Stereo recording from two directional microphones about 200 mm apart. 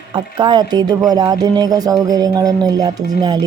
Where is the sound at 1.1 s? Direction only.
20° right (ahead or behind).